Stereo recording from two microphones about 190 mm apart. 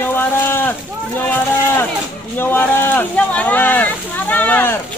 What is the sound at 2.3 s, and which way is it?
Speech, 10° left (ahead or behind).